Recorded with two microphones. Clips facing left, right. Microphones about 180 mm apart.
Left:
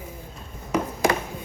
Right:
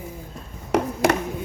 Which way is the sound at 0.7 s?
70° right (ahead or behind).